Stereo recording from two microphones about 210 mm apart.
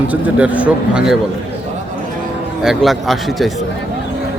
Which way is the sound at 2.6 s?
Centre (ahead or behind).